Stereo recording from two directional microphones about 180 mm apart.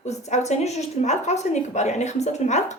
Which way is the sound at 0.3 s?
40° left (ahead or behind).